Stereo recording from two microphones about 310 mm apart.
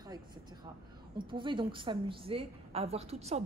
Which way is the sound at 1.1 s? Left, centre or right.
Centre.